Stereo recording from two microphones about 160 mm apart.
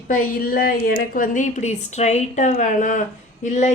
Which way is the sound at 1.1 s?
55° left (ahead or behind).